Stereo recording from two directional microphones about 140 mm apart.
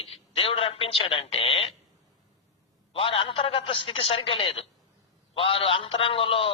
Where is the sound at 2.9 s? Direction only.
40° left (ahead or behind).